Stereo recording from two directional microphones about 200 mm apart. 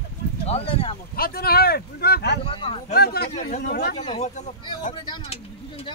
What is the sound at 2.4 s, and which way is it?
Speech, 25° left (ahead or behind).